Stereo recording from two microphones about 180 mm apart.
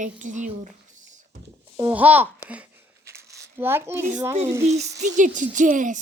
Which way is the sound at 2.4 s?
10° right (ahead or behind).